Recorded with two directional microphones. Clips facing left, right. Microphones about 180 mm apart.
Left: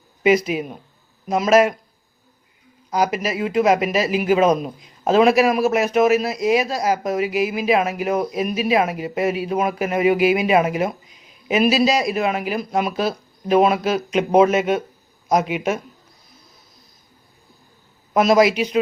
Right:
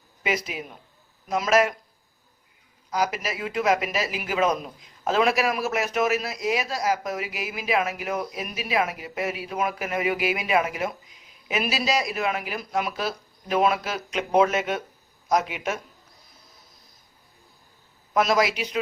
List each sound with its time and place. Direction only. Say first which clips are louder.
0.2 s speech: left 11 dB; 20° left (ahead or behind)
2.9 s speech: left 6 dB; 20° left (ahead or behind)
18.1 s speech: left 7 dB; 20° left (ahead or behind)